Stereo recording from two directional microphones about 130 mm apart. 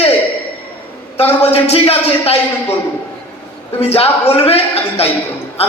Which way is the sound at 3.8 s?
50° left (ahead or behind).